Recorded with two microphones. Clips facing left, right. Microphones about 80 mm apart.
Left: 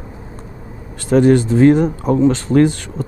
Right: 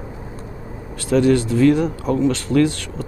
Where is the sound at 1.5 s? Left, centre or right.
Left.